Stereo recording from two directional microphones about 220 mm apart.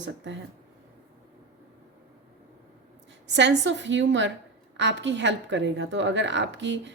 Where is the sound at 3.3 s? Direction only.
55° right (ahead or behind).